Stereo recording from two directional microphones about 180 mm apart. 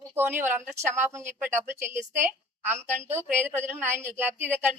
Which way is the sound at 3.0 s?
10° right (ahead or behind).